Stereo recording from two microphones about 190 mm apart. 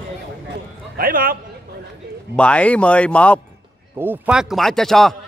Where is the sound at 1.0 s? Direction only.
50° right (ahead or behind).